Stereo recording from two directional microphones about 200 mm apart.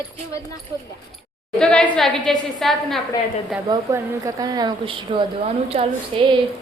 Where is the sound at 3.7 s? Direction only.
15° right (ahead or behind).